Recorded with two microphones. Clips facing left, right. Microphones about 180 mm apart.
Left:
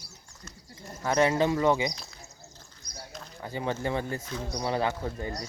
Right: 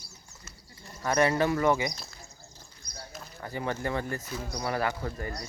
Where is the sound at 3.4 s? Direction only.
20° left (ahead or behind).